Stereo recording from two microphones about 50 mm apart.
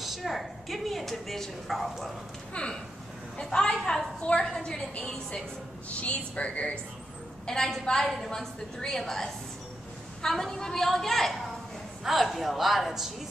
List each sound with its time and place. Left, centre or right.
0.0 s speech: centre
2.5 s a woman's voice: left
5.9 s speech: left
7.4 s a woman's voice: centre